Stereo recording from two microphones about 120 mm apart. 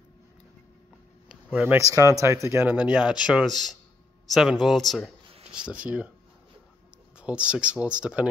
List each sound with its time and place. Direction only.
1.3 s a sound: 10° right (ahead or behind)
1.8 s a man's voice: 25° right (ahead or behind); by 5.1 s centre (ahead or behind)
5.7 s speech: 10° right (ahead or behind)
7.2 s speech: 10° right (ahead or behind)